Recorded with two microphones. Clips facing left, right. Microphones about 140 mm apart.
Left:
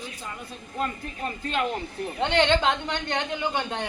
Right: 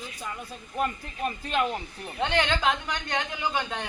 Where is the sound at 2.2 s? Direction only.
25° left (ahead or behind).